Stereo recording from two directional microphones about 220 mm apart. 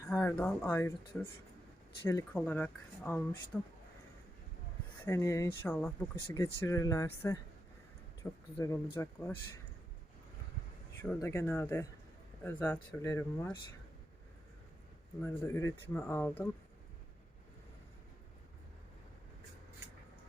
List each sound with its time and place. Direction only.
0.0 s speech: 10° left (ahead or behind)
5.0 s speech: 15° left (ahead or behind)
11.0 s speech: 10° left (ahead or behind)
15.2 s speech: 10° left (ahead or behind)